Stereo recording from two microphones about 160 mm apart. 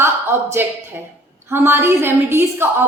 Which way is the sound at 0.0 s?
15° right (ahead or behind).